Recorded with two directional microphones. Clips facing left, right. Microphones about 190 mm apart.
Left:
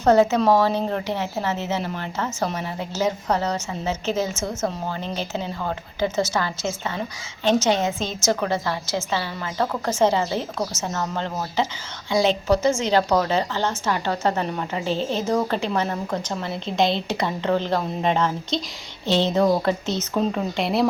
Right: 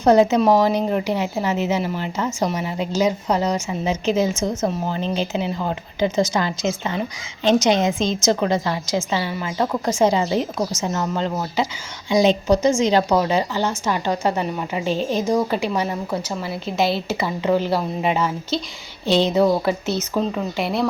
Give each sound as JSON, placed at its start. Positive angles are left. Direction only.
{"t": 0.0, "sound": "speech", "side_deg": -15}
{"t": 12.1, "sound": "a woman's voice", "side_deg": -20}